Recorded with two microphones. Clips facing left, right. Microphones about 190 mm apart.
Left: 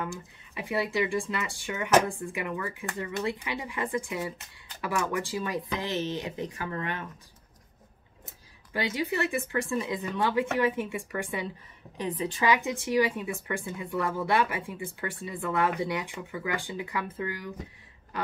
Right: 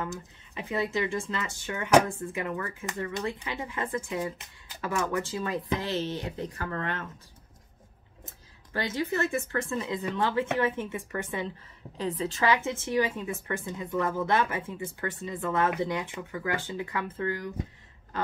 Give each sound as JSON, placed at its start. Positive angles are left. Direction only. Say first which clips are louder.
{"t": 0.6, "sound": "speech", "louder": "left 1 dB", "side_deg": 10}
{"t": 8.7, "sound": "speech", "louder": "even", "side_deg": 15}